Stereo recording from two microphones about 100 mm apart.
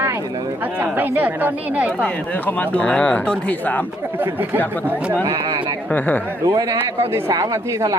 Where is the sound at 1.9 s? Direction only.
10° left (ahead or behind).